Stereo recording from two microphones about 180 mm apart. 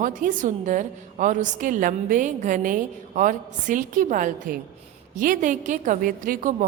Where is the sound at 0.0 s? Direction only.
45° right (ahead or behind).